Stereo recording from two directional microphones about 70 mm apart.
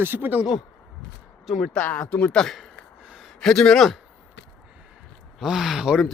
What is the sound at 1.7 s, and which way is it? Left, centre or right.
Speech, centre.